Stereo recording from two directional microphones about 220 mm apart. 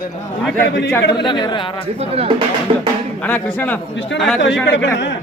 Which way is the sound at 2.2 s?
25° right (ahead or behind).